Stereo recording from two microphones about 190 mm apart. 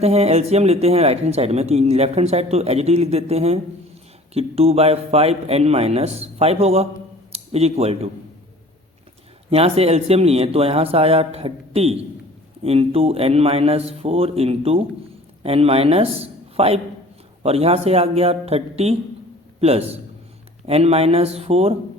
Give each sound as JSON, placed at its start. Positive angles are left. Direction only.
{"t": 0.0, "sound": "speech", "side_deg": -35}
{"t": 9.5, "sound": "a man's voice", "side_deg": -30}